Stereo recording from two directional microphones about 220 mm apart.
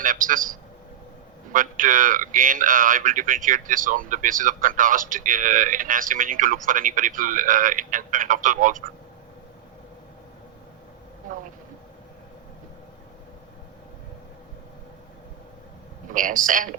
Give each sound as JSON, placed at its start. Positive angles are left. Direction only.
{"t": 0.0, "sound": "speech", "side_deg": -35}
{"t": 1.5, "sound": "speech", "side_deg": -35}
{"t": 16.1, "sound": "speech", "side_deg": -35}